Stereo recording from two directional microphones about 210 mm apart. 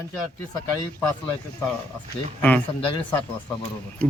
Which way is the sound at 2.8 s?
25° left (ahead or behind).